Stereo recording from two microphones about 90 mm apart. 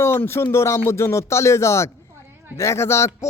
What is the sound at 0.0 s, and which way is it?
A man's voice, 30° left (ahead or behind).